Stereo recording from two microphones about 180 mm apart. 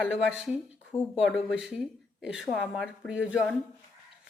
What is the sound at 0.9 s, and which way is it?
Speech, 20° left (ahead or behind).